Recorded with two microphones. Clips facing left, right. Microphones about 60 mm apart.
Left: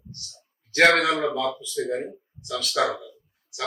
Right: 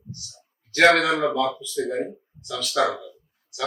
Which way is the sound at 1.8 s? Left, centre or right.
Centre.